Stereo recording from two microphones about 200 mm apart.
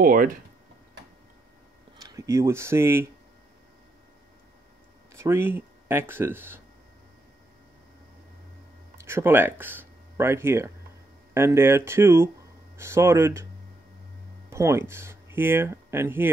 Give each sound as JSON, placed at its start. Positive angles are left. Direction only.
{"t": 0.0, "sound": "speech", "side_deg": -45}
{"t": 2.0, "sound": "speech", "side_deg": -15}
{"t": 5.1, "sound": "speech", "side_deg": -10}
{"t": 9.0, "sound": "speech", "side_deg": -10}
{"t": 14.5, "sound": "speech", "side_deg": -15}